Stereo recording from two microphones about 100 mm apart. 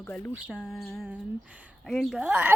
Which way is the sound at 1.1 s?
15° right (ahead or behind).